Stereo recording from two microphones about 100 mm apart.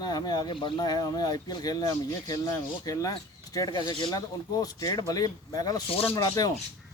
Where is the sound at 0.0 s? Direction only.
45° left (ahead or behind).